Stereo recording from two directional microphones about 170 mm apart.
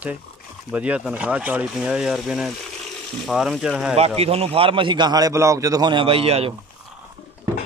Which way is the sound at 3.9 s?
35° right (ahead or behind).